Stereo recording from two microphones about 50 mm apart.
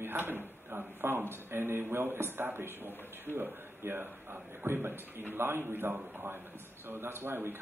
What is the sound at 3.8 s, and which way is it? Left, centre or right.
A man's voice, right.